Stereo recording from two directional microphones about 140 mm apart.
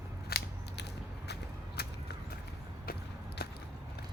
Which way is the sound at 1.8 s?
90° left.